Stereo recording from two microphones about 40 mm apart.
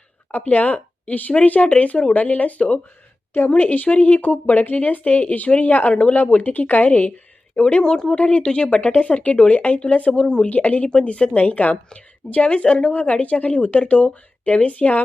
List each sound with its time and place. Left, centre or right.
0.3 s a woman's voice: left
7.5 s speech: left
8.1 s a woman's voice: left
10.5 s speech: left
10.8 s speech: left